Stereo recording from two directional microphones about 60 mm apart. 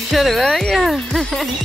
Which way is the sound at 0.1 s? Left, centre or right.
Centre.